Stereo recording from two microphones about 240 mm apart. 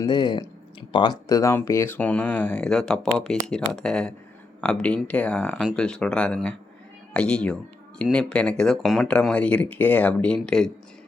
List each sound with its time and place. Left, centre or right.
0.0 s speech: centre